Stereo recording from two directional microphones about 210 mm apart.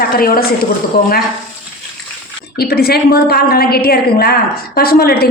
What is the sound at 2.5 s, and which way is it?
A woman's voice, 50° left (ahead or behind).